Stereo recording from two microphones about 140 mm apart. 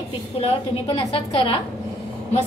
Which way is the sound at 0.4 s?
45° left (ahead or behind).